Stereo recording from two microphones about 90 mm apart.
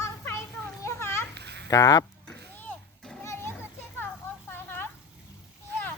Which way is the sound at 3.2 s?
25° left (ahead or behind).